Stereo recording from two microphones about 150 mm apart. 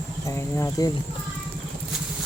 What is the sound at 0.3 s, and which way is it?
Speech, 20° left (ahead or behind).